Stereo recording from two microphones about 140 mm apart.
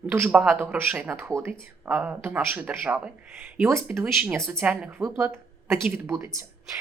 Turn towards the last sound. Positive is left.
turn(degrees=-20)  # may be behind; listen again after turning